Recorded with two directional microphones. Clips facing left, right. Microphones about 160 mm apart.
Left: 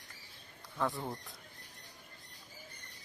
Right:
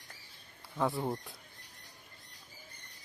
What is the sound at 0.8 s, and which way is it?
Speech, 20° right (ahead or behind).